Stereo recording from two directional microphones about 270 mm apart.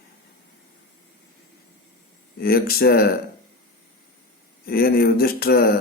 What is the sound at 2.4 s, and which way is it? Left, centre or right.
Speech, left.